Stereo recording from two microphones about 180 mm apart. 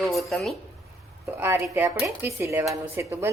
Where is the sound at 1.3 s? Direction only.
15° right (ahead or behind).